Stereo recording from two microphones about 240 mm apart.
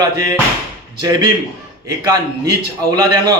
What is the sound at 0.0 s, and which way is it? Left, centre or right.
Speech, centre.